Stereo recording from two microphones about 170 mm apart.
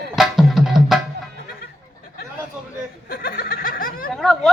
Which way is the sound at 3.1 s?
60° left (ahead or behind).